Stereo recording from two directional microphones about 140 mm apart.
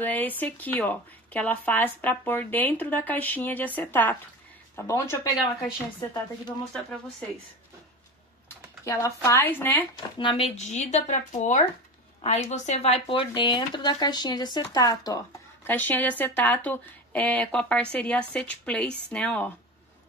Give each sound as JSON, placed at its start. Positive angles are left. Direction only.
{"t": 0.0, "sound": "speech", "side_deg": 10}
{"t": 8.8, "sound": "speech", "side_deg": 20}
{"t": 9.9, "sound": "speech", "side_deg": 35}
{"t": 10.6, "sound": "speech", "side_deg": 55}